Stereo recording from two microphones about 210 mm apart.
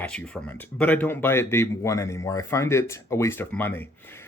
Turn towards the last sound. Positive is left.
turn(degrees=10)  # may be behind; listen again after turning